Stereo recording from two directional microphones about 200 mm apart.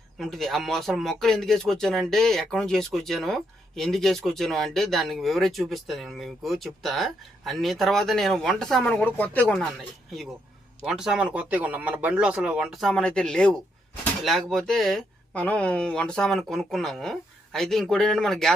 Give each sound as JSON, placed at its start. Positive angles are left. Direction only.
{"t": 0.2, "sound": "speech", "side_deg": 0}
{"t": 10.8, "sound": "speech", "side_deg": -5}